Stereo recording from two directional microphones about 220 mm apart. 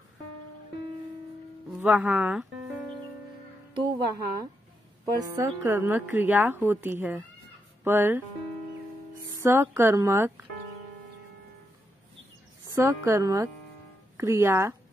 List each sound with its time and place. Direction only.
1.8 s speech: 5° right (ahead or behind)
3.7 s a woman's voice: 15° right (ahead or behind)
9.3 s a woman's voice: 10° right (ahead or behind)
12.6 s a woman's voice: 10° right (ahead or behind)